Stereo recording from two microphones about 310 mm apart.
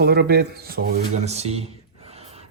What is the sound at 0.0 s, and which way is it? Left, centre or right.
Speech, right.